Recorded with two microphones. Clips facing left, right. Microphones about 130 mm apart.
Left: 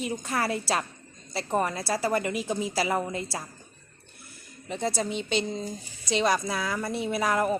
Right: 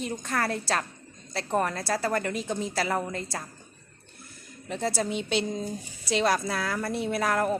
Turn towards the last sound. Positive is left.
turn(degrees=0)  # may be behind; listen again after turning